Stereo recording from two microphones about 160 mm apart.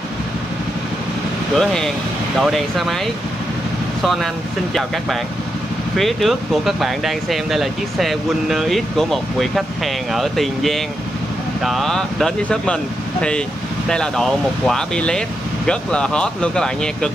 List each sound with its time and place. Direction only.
1.6 s speech: 5° left (ahead or behind)
4.0 s speech: centre (ahead or behind)
5.9 s speech: centre (ahead or behind)
13.8 s speech: 5° left (ahead or behind)